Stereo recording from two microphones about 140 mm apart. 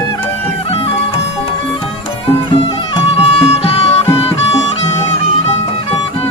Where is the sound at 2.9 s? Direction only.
45° left (ahead or behind).